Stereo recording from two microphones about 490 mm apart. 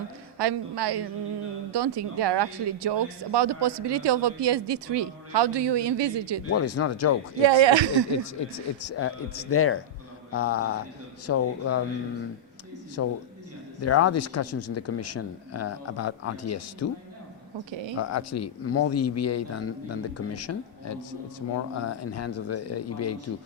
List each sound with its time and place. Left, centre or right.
0.3 s speech: right
6.5 s speech: left
7.4 s speech: right
8.4 s speech: left
13.0 s speech: left
17.7 s speech: right
17.9 s speech: left